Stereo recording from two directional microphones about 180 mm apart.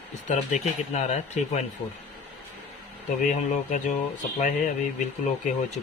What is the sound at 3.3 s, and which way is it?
Speech, 45° left (ahead or behind).